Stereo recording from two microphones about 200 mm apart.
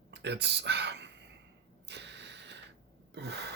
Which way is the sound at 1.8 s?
60° right (ahead or behind).